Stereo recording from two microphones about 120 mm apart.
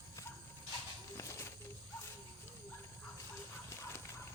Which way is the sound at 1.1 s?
25° left (ahead or behind).